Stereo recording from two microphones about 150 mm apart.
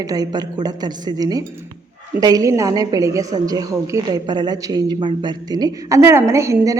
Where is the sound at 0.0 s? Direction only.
25° right (ahead or behind).